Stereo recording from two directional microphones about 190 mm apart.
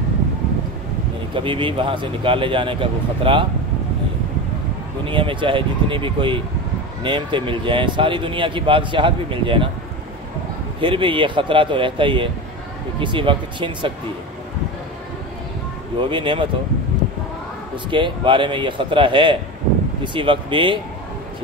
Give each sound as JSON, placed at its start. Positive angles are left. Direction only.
{"t": 1.3, "sound": "speech", "side_deg": -25}
{"t": 5.0, "sound": "speech", "side_deg": -25}
{"t": 10.8, "sound": "speech", "side_deg": -25}
{"t": 16.0, "sound": "speech", "side_deg": -25}
{"t": 17.8, "sound": "speech", "side_deg": -25}